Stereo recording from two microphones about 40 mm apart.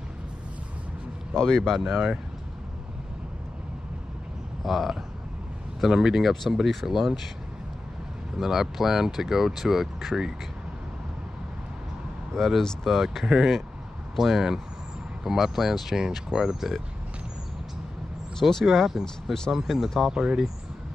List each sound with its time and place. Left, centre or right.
1.3 s speech: centre
1.6 s speech: centre
4.6 s speech: centre
8.4 s speech: centre
12.4 s speech: centre
12.8 s speech: centre
18.5 s speech: centre
18.9 s speech: centre
20.1 s speech: centre